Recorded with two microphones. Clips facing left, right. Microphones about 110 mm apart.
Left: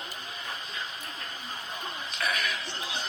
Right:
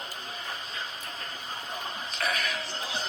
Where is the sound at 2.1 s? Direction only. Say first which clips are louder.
Even; 35° right (ahead or behind).